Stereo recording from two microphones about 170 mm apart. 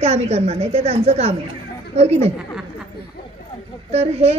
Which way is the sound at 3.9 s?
40° right (ahead or behind).